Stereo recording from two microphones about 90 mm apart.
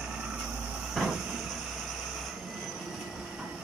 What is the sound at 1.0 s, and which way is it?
Vehicle, centre (ahead or behind).